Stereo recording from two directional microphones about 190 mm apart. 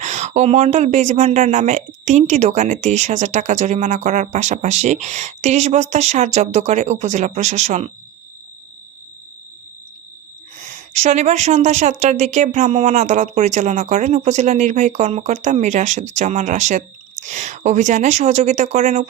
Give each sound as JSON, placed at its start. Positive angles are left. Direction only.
{"t": 0.0, "sound": "a woman's voice", "side_deg": -40}
{"t": 10.6, "sound": "a woman's voice", "side_deg": -40}